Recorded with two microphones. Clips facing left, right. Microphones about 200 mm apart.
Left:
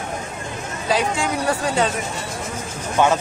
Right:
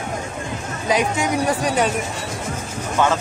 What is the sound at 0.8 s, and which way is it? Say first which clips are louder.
Speech: right 1 dB; 20° right (ahead or behind).